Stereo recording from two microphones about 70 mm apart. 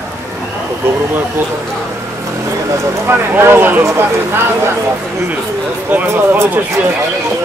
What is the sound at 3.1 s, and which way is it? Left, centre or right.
Speech, right.